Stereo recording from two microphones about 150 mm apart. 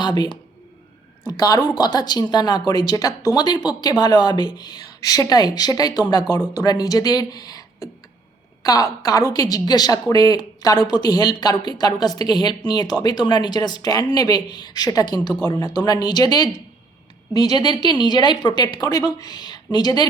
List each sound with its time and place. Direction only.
0.0 s a woman's voice: 30° left (ahead or behind)